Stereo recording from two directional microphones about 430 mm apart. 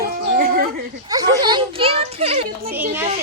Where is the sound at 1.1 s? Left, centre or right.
Centre.